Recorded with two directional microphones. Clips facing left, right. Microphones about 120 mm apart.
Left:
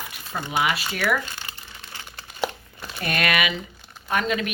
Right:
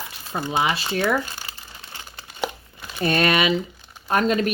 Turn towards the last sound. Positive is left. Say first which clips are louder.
# right 4 dB
turn(degrees=-40)  # may be behind; listen again after turning